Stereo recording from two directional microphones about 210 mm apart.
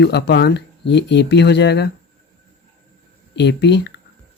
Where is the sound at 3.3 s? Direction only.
55° left (ahead or behind).